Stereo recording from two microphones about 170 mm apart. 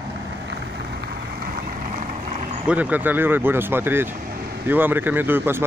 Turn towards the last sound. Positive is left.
turn(degrees=-10)  # may be behind; listen again after turning